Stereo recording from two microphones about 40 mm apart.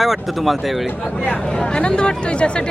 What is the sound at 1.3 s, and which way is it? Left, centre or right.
Speech, centre.